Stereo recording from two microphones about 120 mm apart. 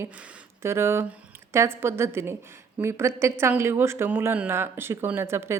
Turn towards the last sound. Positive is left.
turn(degrees=-20)  # may be behind; listen again after turning